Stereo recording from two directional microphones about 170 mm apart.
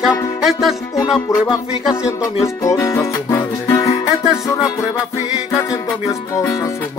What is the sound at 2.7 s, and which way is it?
Music, 20° left (ahead or behind).